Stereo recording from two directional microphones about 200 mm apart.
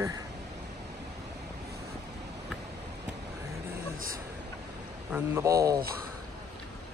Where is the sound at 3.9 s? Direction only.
45° right (ahead or behind).